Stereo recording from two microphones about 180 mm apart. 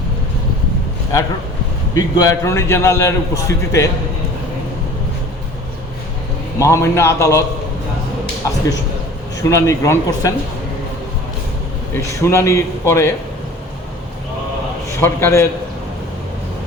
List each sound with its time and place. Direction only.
2.0 s a man's voice: 20° left (ahead or behind)
6.6 s a man's voice: 15° left (ahead or behind)
9.4 s a man's voice: 15° left (ahead or behind)
11.9 s a man's voice: 15° left (ahead or behind)
15.0 s a man's voice: 15° left (ahead or behind)